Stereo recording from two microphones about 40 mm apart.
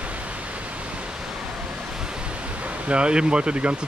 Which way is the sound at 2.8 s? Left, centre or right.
Right.